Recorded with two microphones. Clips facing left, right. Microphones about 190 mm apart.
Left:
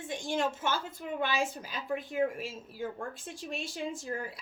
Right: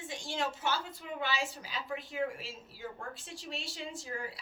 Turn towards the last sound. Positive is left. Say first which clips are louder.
# left 4 dB
turn(degrees=50)  # may be behind; listen again after turning